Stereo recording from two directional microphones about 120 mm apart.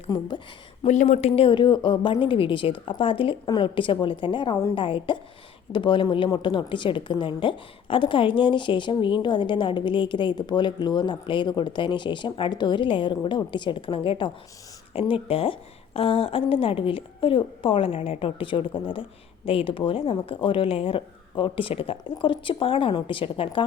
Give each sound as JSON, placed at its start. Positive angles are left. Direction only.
{"t": 0.1, "sound": "a woman's voice", "side_deg": 40}
{"t": 0.9, "sound": "a woman's voice", "side_deg": 80}
{"t": 1.5, "sound": "a woman's voice", "side_deg": 40}